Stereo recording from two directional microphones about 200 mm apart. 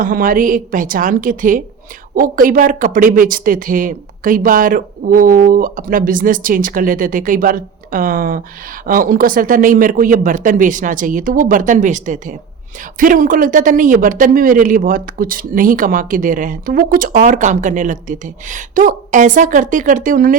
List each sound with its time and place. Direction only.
0.0 s speech: 45° right (ahead or behind)